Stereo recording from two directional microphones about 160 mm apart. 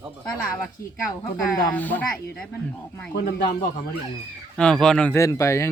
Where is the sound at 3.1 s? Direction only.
90° left.